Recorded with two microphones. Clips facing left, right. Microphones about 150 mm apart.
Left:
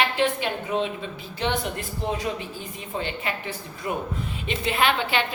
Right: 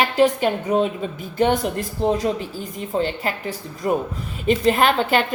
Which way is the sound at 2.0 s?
35° right (ahead or behind).